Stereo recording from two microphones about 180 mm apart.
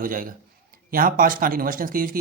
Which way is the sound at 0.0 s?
50° right (ahead or behind).